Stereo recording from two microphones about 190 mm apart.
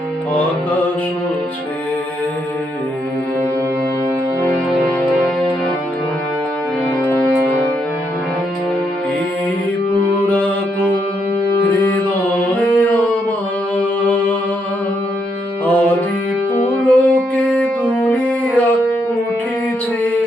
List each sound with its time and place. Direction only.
10.2 s music: 10° left (ahead or behind)
11.9 s mantra: 10° left (ahead or behind)
15.6 s music: 5° left (ahead or behind)